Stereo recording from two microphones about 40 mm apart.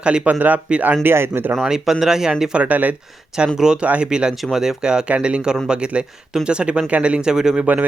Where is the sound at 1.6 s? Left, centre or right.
Centre.